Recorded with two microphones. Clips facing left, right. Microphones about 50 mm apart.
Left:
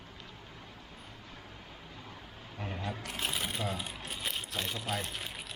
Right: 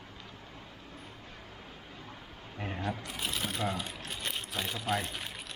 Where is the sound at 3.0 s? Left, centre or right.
Left.